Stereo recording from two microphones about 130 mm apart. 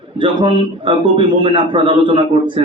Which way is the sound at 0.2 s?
40° right (ahead or behind).